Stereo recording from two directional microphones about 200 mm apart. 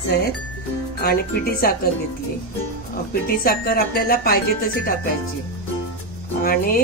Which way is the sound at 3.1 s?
50° left (ahead or behind).